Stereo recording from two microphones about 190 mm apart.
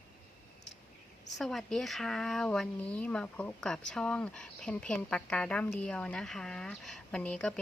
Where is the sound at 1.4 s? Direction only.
Centre (ahead or behind).